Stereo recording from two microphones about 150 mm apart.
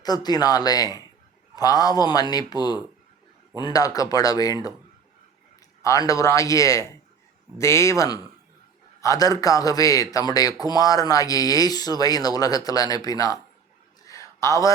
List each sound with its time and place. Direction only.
0.0 s a man's voice: 25° left (ahead or behind)
5.8 s a man's voice: 20° left (ahead or behind)
14.0 s a sound: 20° left (ahead or behind)